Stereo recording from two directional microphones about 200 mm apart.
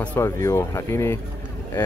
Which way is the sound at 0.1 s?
15° left (ahead or behind).